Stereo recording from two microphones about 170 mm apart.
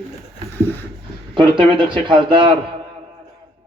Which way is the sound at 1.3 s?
30° right (ahead or behind).